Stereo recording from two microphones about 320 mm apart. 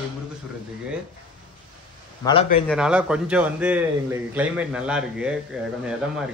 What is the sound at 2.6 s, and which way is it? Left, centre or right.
A man's voice, centre.